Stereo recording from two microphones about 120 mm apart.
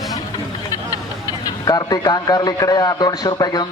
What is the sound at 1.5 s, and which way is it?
A man's voice, 35° left (ahead or behind).